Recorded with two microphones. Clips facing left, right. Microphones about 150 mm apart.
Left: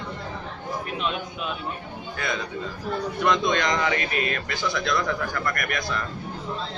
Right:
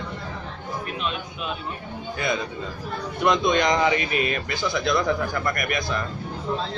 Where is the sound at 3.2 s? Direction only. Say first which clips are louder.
Right 3 dB; 15° right (ahead or behind).